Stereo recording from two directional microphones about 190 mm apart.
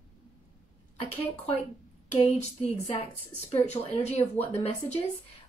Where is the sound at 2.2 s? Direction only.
35° left (ahead or behind).